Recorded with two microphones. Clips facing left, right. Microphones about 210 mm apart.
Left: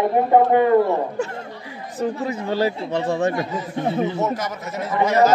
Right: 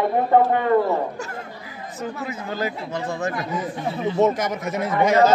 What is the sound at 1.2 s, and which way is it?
Chatter, 25° left (ahead or behind).